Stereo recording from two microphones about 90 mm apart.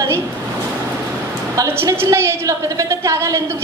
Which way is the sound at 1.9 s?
30° right (ahead or behind).